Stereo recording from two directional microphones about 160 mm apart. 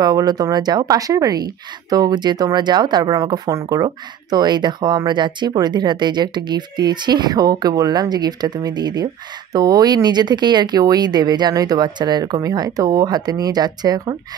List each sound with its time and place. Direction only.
0.0 s speech: 25° right (ahead or behind)